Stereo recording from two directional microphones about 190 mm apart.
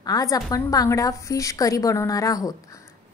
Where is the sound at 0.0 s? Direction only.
20° left (ahead or behind).